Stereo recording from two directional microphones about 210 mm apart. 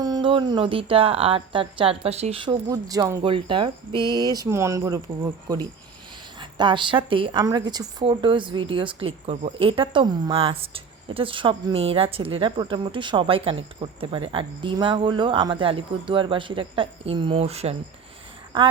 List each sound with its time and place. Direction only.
0.0 s speech: 20° right (ahead or behind)